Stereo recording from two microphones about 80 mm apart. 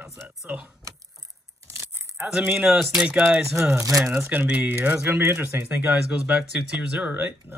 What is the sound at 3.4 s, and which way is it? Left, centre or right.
Speech, right.